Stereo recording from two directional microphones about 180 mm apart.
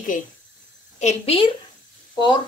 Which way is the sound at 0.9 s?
35° left (ahead or behind).